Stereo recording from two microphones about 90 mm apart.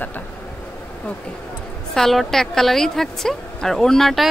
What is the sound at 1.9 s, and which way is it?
Speech, 5° left (ahead or behind).